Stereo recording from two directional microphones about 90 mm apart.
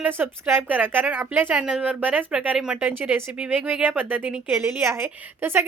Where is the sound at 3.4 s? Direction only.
15° right (ahead or behind).